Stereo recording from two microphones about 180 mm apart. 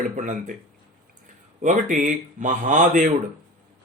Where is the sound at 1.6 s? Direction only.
45° right (ahead or behind).